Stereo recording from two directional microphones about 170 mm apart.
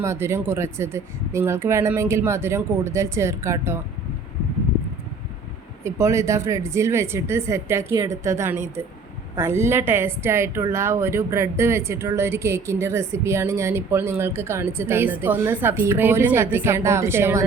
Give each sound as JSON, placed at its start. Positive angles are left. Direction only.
{"t": 0.0, "sound": "a woman's voice", "side_deg": -15}
{"t": 5.8, "sound": "a woman's voice", "side_deg": -15}